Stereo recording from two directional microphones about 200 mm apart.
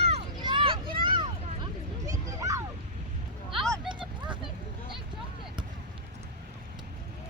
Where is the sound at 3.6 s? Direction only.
Centre (ahead or behind).